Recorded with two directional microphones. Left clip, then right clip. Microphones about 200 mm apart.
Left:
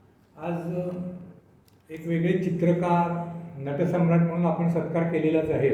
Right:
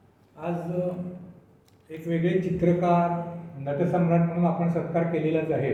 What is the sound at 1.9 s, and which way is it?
Speech, 20° left (ahead or behind).